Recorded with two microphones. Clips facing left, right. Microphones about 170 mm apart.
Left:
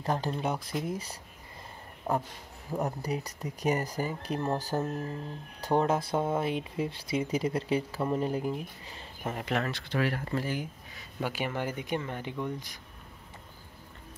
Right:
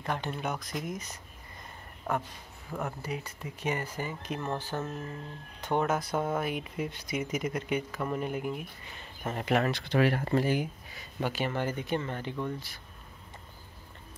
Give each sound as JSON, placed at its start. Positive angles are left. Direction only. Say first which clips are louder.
{"t": 0.0, "sound": "speech", "louder": "left 3 dB", "side_deg": 35}
{"t": 2.8, "sound": "speech", "louder": "left 3 dB", "side_deg": 40}
{"t": 9.2, "sound": "speech", "louder": "even", "side_deg": 5}
{"t": 9.5, "sound": "speech", "louder": "right 5 dB", "side_deg": -15}
{"t": 9.8, "sound": "speech", "louder": "right 4 dB", "side_deg": -70}
{"t": 10.4, "sound": "speech", "louder": "right 5 dB", "side_deg": -15}
{"t": 11.0, "sound": "speech", "louder": "right 1 dB", "side_deg": 0}
{"t": 11.3, "sound": "speech", "louder": "right 2 dB", "side_deg": 10}